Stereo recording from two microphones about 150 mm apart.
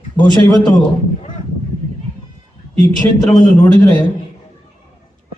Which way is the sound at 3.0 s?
20° left (ahead or behind).